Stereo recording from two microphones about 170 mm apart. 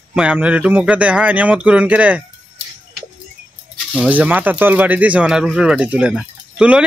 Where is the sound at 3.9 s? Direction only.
5° right (ahead or behind).